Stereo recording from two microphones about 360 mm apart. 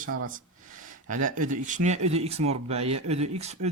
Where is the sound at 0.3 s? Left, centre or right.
Right.